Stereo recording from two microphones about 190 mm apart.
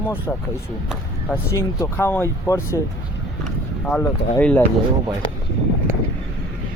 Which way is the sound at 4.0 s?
10° left (ahead or behind).